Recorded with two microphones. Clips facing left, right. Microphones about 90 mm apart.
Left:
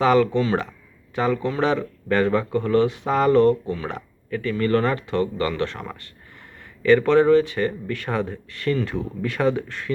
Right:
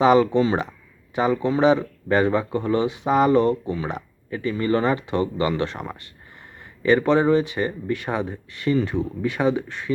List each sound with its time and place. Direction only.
0.0 s speech: 20° right (ahead or behind)